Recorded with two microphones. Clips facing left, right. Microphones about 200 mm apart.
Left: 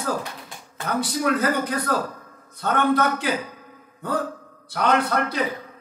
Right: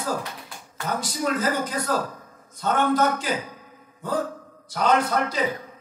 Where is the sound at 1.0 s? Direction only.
60° left (ahead or behind).